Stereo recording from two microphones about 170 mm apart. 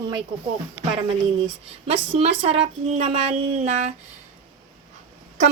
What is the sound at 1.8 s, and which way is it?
Speech, 35° right (ahead or behind).